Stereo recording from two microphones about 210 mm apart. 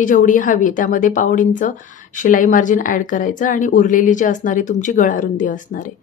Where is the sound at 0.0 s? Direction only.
40° left (ahead or behind).